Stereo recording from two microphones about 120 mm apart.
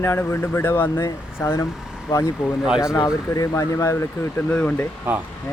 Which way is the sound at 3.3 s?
25° left (ahead or behind).